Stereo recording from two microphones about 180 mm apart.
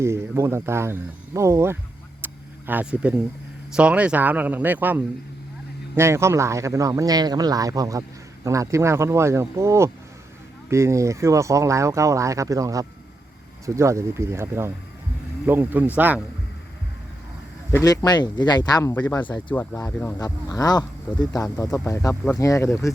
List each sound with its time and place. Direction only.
0.0 s speech: 15° right (ahead or behind)
2.2 s a sound: 10° right (ahead or behind)
3.8 s speech: 5° right (ahead or behind)
17.7 s speech: 15° left (ahead or behind)